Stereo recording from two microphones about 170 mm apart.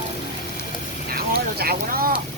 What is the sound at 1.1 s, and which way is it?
Vehicle, 65° right (ahead or behind).